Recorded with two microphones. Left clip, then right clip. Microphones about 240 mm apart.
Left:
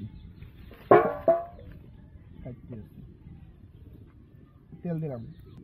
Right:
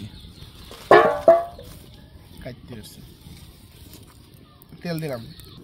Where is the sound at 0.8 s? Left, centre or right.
Right.